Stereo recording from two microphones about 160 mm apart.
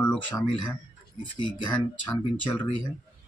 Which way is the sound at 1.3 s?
30° left (ahead or behind).